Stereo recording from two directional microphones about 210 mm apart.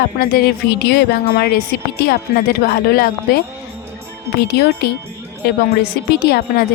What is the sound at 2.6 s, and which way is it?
Speech, 45° left (ahead or behind).